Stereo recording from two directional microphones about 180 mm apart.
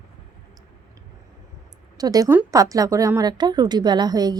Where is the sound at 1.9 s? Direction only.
20° right (ahead or behind).